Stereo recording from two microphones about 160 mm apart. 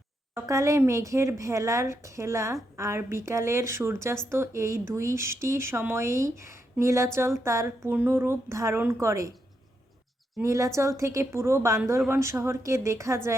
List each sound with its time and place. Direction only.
0.3 s a woman's voice: 20° right (ahead or behind)
10.4 s a woman's voice: 20° right (ahead or behind)